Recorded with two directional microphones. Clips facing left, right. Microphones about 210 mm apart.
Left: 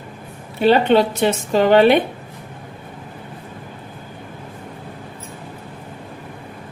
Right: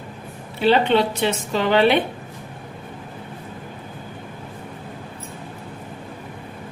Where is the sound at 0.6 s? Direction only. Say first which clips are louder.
Left 3 dB; 45° left (ahead or behind).